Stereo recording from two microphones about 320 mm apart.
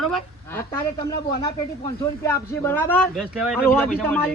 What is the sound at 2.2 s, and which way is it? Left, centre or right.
Speech, centre.